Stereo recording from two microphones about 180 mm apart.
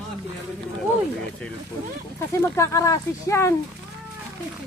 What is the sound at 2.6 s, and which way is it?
Speech, 15° left (ahead or behind).